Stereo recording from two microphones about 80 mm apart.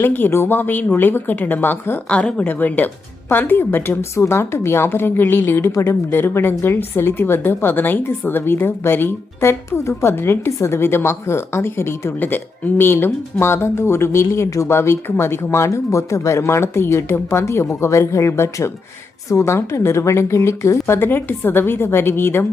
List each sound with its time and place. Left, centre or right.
0.0 s a woman's voice: left
2.0 s a woman's voice: centre; by 5.7 s left
5.7 s speech: left
6.1 s a woman's voice: left